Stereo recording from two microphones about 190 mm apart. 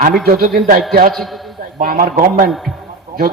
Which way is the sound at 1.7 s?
45° right (ahead or behind).